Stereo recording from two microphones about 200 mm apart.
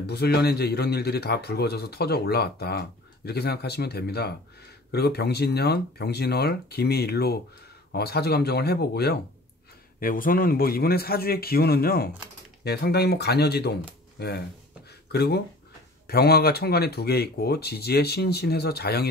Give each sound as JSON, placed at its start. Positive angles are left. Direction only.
{"t": 0.0, "sound": "a man's voice", "side_deg": 55}